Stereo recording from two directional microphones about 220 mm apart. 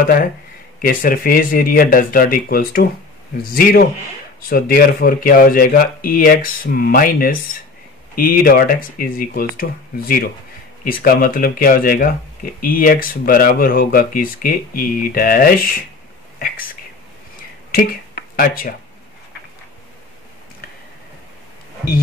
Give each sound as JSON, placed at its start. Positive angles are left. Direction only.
{"t": 0.0, "sound": "speech", "side_deg": 40}
{"t": 18.3, "sound": "speech", "side_deg": 40}